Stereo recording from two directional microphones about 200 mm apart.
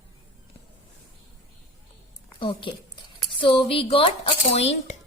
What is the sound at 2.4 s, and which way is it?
A woman's voice, 25° left (ahead or behind).